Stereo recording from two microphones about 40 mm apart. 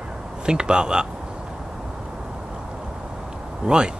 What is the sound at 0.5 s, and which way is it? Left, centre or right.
Speech, right.